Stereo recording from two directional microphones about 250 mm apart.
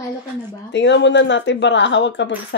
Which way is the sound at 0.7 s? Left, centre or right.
Left.